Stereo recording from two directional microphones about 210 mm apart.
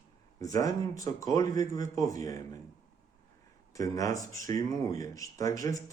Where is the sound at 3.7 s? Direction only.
15° left (ahead or behind).